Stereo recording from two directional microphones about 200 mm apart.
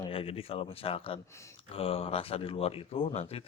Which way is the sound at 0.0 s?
25° left (ahead or behind).